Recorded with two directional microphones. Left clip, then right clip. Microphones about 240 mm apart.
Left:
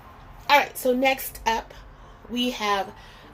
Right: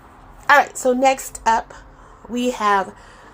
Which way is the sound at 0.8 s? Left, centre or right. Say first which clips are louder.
Right 5 dB; right.